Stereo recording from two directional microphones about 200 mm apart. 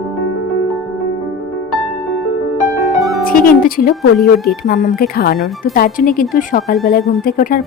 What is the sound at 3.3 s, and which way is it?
Speech, 45° left (ahead or behind).